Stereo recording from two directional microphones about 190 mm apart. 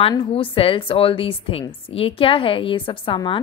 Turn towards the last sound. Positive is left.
turn(degrees=25)  # may be behind; listen again after turning